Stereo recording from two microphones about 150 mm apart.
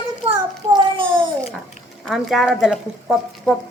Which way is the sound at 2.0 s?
Centre (ahead or behind).